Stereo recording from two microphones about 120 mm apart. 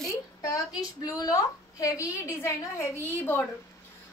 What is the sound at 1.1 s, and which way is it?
A woman's voice, 30° left (ahead or behind).